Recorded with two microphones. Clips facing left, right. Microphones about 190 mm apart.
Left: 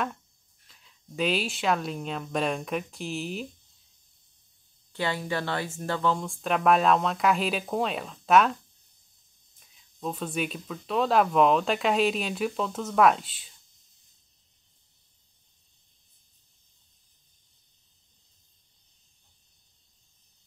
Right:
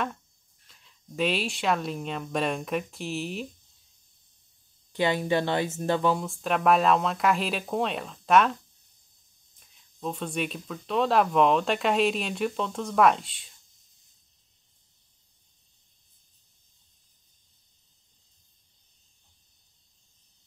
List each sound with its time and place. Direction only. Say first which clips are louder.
0.7 s speech: right 1 dB; centre (ahead or behind)
4.9 s speech: right 5 dB; 20° right (ahead or behind)
6.1 s speech: even; centre (ahead or behind)
9.6 s speech: even; centre (ahead or behind)